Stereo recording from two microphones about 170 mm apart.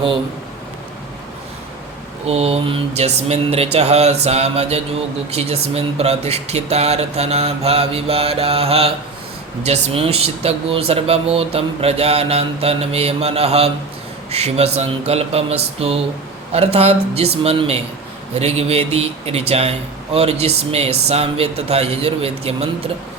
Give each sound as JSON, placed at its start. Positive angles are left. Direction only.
{"t": 2.2, "sound": "speech", "side_deg": -35}